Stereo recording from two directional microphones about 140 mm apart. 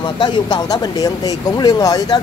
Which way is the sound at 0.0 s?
30° left (ahead or behind).